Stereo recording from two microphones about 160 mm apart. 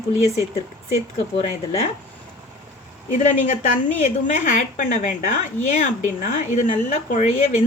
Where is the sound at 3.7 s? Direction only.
50° left (ahead or behind).